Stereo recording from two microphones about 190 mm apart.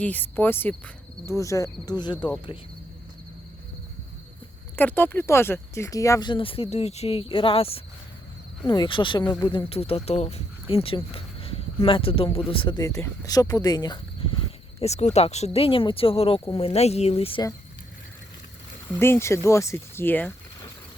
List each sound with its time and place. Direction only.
0.0 s speech: 10° left (ahead or behind)
4.8 s speech: 10° left (ahead or behind); by 14.3 s 25° left (ahead or behind)
14.8 s speech: 35° left (ahead or behind)
18.9 s speech: 15° left (ahead or behind)